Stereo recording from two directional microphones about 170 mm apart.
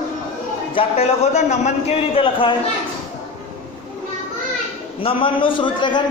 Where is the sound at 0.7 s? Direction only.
35° left (ahead or behind).